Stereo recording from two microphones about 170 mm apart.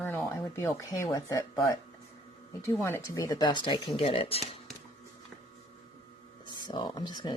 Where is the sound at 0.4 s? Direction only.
20° left (ahead or behind).